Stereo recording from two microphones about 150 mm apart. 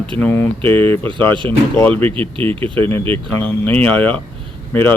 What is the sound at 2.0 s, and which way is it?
Speech, 35° right (ahead or behind).